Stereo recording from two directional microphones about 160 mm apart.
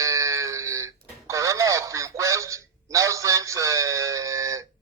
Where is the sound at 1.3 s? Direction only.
20° right (ahead or behind).